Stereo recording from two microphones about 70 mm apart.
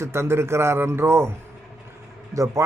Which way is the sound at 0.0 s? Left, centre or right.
Right.